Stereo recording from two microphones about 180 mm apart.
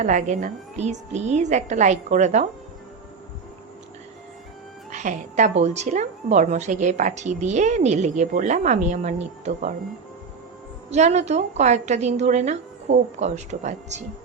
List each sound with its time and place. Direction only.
0.0 s a woman's voice: 45° right (ahead or behind)
4.9 s a woman's voice: 40° right (ahead or behind)
10.8 s a woman's voice: 40° right (ahead or behind)